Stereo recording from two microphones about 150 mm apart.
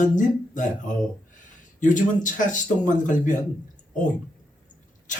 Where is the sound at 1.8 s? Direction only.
55° left (ahead or behind).